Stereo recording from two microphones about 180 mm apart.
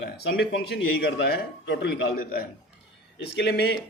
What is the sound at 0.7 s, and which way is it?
A man's voice, 70° left (ahead or behind).